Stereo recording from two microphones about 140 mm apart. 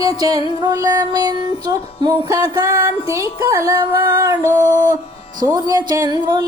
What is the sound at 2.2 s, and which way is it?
Music, 25° right (ahead or behind).